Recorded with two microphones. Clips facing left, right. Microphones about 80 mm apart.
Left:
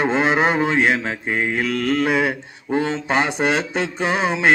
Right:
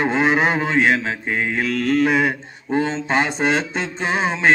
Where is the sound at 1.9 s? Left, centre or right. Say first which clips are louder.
Right 2 dB; centre.